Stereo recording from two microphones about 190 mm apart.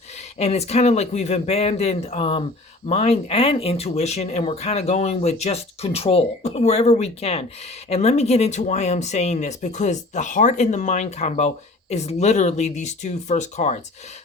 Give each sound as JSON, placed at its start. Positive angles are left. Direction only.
{"t": 0.3, "sound": "speech", "side_deg": 35}